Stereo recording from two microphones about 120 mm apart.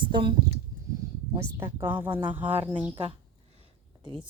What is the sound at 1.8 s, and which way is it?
Speech, 15° right (ahead or behind).